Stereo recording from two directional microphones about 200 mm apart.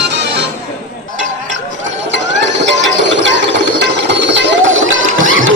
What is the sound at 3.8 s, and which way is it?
Music, 60° right (ahead or behind).